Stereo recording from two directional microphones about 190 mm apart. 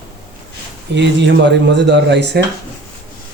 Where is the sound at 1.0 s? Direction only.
70° right (ahead or behind).